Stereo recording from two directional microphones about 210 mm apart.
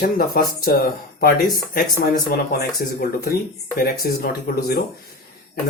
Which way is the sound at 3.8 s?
45° left (ahead or behind).